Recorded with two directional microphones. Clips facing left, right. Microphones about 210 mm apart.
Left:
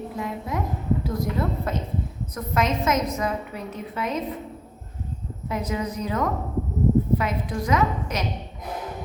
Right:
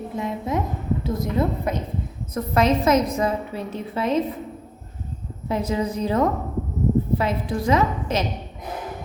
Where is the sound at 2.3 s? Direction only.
30° right (ahead or behind).